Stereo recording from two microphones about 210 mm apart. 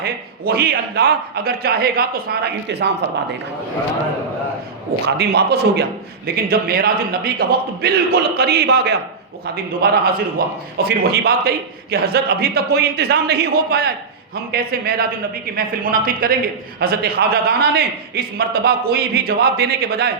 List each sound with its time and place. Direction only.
0.0 s a man's voice: 45° right (ahead or behind)
5.0 s a man's voice: 50° right (ahead or behind)